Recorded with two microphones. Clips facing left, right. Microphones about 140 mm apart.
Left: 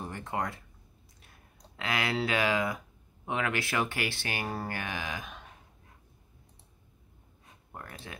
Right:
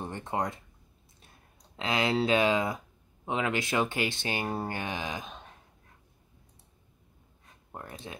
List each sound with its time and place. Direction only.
0.0 s speech: 20° right (ahead or behind)
7.7 s speech: 20° right (ahead or behind)